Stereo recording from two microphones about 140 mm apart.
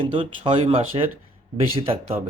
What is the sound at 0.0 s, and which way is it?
Speech, 40° right (ahead or behind).